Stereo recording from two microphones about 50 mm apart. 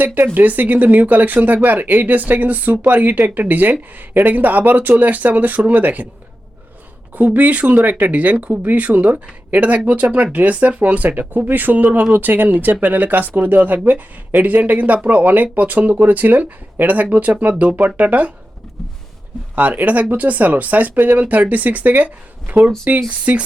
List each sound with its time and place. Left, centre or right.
0.0 s speech: right
7.2 s speech: right
19.5 s speech: right